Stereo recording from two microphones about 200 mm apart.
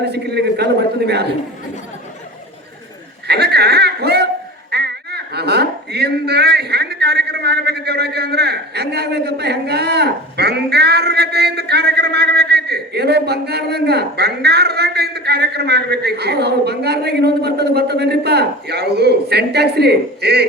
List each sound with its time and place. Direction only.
0.0 s a man's voice: 55° right (ahead or behind)
3.2 s a man's voice: 55° right (ahead or behind)